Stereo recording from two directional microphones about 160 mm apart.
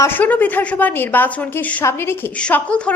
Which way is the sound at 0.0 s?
10° left (ahead or behind).